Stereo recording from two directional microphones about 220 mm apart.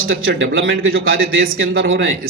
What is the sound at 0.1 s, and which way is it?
Speech, 65° right (ahead or behind).